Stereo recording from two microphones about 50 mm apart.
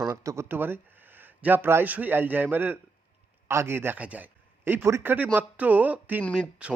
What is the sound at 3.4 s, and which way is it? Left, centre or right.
Speech, right.